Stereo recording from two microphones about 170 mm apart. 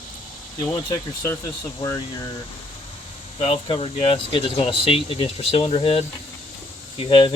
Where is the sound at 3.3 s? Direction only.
35° left (ahead or behind).